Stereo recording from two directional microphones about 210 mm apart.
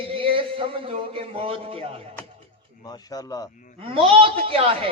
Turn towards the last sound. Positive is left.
turn(degrees=-25)  # may be behind; listen again after turning